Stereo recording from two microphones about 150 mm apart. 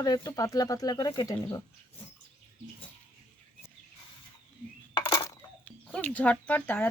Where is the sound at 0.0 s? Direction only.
25° left (ahead or behind).